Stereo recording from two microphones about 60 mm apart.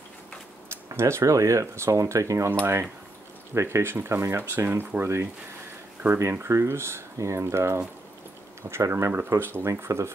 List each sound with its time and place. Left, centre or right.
0.9 s speech: right
2.6 s speech: right
4.6 s speech: right
5.0 s speech: right
6.0 s speech: right
6.4 s speech: right
9.1 s speech: right